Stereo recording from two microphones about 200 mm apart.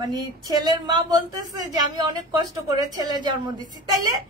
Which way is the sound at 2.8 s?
20° right (ahead or behind).